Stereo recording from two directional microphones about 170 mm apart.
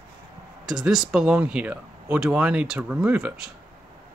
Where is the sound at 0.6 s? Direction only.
Centre (ahead or behind).